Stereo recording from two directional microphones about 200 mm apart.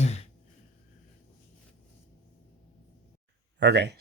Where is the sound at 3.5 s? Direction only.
60° right (ahead or behind).